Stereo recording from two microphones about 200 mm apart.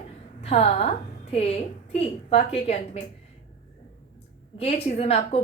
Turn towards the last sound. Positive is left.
turn(degrees=30)  # may be behind; listen again after turning